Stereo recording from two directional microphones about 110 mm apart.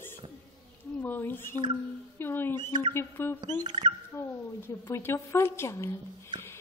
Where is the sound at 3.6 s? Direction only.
40° right (ahead or behind).